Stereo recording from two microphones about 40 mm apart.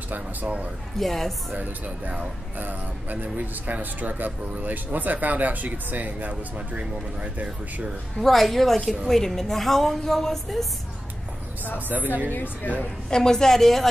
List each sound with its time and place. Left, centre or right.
0.1 s speech: right
0.9 s a woman's voice: centre
1.5 s speech: right
8.2 s a woman's voice: centre
12.3 s speech: left
13.1 s a woman's voice: centre